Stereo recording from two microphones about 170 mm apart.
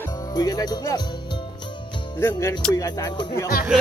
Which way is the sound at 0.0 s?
20° left (ahead or behind).